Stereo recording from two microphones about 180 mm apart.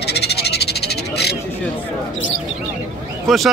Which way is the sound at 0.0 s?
65° left (ahead or behind).